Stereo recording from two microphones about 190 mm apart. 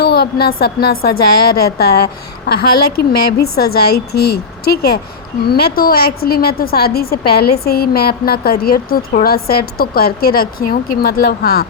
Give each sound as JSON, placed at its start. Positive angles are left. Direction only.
{"t": 0.0, "sound": "a woman's voice", "side_deg": 55}